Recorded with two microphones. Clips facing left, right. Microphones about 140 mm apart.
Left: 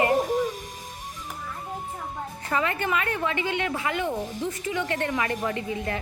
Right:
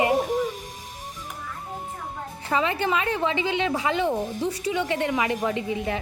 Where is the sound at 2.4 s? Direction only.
20° right (ahead or behind).